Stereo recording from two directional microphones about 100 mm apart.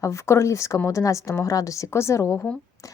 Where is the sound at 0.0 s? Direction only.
30° left (ahead or behind).